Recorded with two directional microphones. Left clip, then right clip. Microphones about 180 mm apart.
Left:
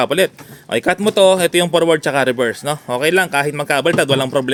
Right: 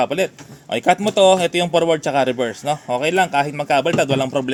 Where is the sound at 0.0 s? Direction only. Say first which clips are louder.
Left 4 dB; 45° left (ahead or behind).